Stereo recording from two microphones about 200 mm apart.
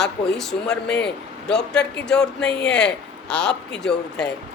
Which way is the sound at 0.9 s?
55° left (ahead or behind).